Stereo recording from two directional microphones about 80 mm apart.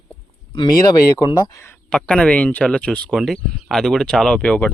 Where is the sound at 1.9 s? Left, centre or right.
Centre.